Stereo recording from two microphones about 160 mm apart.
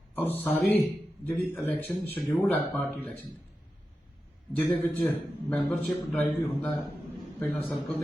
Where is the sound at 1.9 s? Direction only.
5° left (ahead or behind).